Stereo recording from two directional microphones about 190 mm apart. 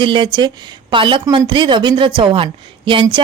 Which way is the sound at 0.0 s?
25° right (ahead or behind).